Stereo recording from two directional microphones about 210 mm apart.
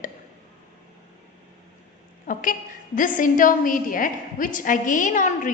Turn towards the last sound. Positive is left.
turn(degrees=35)  # may be behind; listen again after turning